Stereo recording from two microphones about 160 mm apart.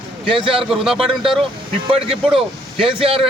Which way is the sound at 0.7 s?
5° right (ahead or behind).